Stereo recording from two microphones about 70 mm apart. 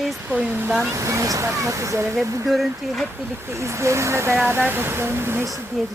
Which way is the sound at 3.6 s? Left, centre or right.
Right.